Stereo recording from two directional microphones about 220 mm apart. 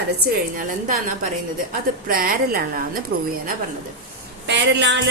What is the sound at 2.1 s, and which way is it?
Speech, 40° right (ahead or behind).